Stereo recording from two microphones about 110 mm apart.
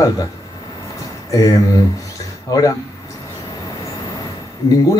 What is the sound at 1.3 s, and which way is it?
Speech, 35° left (ahead or behind).